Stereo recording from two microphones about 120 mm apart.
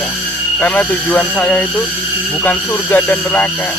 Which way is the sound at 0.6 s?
10° left (ahead or behind).